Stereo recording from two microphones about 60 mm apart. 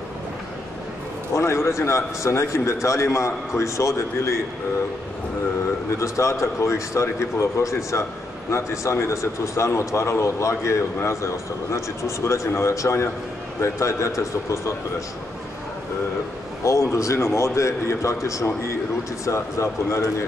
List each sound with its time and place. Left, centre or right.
1.3 s a man's voice: left
5.9 s a man's voice: left
16.6 s a man's voice: left